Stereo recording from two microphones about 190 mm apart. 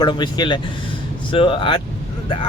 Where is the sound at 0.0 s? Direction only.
25° left (ahead or behind).